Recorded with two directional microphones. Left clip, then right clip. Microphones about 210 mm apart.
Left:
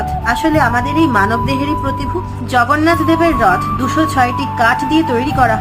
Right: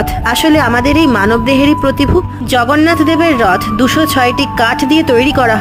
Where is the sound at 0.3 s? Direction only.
50° right (ahead or behind).